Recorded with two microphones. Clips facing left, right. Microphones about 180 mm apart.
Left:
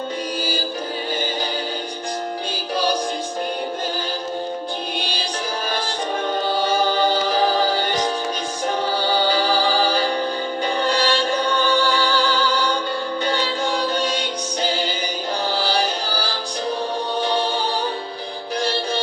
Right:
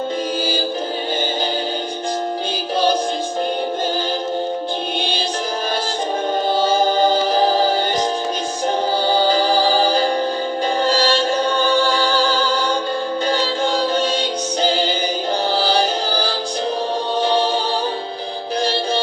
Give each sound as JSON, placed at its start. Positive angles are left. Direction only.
{"t": 6.7, "sound": "a capella", "side_deg": -45}
{"t": 9.0, "sound": "music", "side_deg": -40}
{"t": 11.0, "sound": "chant", "side_deg": -40}
{"t": 11.8, "sound": "music", "side_deg": -40}